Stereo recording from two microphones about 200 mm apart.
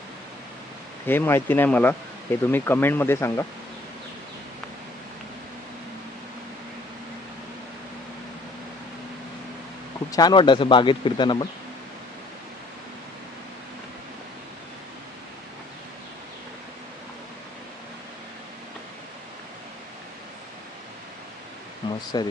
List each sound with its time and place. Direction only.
1.0 s speech: 10° left (ahead or behind)
10.1 s speech: 20° left (ahead or behind)
21.8 s pink noise: 20° left (ahead or behind)